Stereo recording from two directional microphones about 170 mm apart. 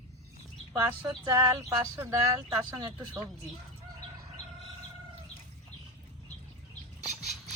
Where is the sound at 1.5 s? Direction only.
20° right (ahead or behind).